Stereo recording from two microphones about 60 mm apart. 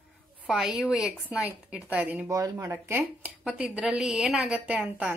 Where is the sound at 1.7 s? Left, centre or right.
Centre.